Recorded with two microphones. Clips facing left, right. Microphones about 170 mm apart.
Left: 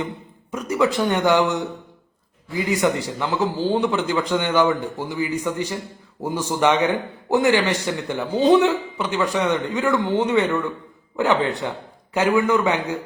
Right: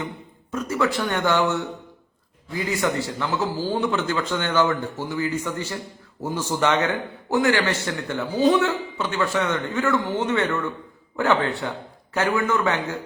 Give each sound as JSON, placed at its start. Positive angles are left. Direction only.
{"t": 0.5, "sound": "a man's voice", "side_deg": 15}